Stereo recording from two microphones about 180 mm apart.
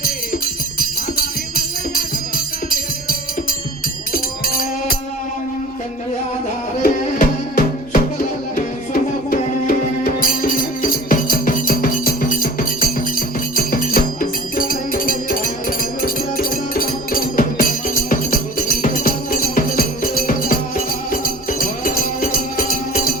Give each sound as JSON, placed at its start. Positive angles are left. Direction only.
{"t": 0.8, "sound": "music", "side_deg": 50}
{"t": 6.8, "sound": "music", "side_deg": 50}